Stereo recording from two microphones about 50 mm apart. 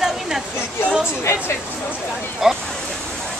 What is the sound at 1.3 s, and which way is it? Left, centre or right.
Speech, left.